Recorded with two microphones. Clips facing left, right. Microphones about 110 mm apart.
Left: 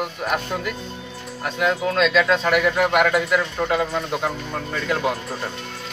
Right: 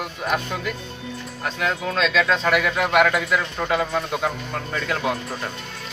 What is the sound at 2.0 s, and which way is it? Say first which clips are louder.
Speech: left 1 dB; 10° left (ahead or behind).